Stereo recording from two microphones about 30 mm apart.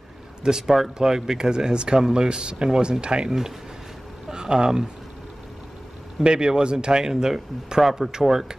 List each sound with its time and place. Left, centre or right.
0.4 s speech: centre
3.3 s speech: centre
6.2 s speech: right